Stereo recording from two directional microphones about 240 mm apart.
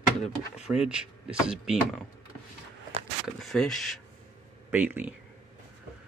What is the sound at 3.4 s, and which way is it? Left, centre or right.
Speech, centre.